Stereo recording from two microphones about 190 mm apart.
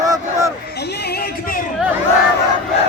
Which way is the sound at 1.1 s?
50° left (ahead or behind).